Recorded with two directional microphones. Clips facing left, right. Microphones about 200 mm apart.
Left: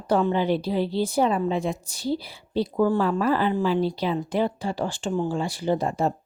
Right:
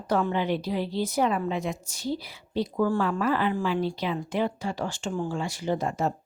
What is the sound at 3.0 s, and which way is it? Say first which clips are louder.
Speech: left 3 dB; 35° left (ahead or behind).